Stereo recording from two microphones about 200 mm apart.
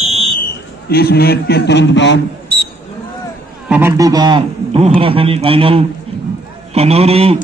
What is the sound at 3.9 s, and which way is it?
A man's voice, 20° right (ahead or behind).